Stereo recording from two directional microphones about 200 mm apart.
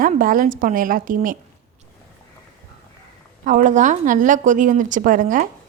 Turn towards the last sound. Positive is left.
turn(degrees=-40)  # may be behind; listen again after turning